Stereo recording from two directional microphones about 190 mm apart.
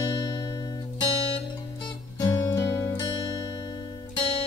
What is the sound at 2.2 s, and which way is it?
Music, 15° left (ahead or behind).